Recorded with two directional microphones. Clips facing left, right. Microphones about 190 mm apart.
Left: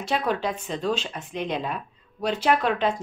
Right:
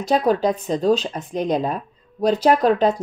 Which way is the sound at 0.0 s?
35° right (ahead or behind).